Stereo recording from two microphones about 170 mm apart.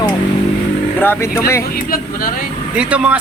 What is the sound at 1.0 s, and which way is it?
Speech, 15° left (ahead or behind).